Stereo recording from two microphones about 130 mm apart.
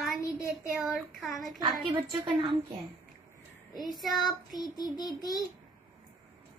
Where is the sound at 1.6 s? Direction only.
35° right (ahead or behind).